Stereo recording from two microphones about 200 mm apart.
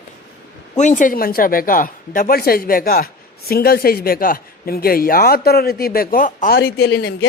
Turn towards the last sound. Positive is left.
turn(degrees=55)  # may be behind; listen again after turning